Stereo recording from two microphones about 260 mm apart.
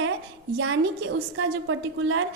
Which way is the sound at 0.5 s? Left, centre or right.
Right.